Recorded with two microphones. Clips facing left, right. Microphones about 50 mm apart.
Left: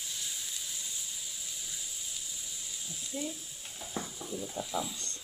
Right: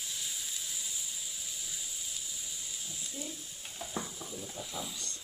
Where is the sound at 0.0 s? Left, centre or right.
Centre.